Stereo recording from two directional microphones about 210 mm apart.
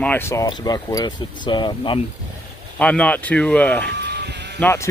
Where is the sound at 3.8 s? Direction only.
55° right (ahead or behind).